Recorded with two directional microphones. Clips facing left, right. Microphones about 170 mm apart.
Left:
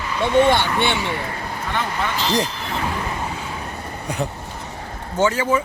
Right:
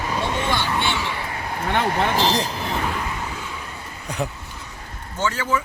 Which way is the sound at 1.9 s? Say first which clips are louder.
Right 4 dB; 50° right (ahead or behind).